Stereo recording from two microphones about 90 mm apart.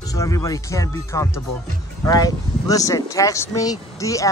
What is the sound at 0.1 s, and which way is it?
Speech, 40° left (ahead or behind).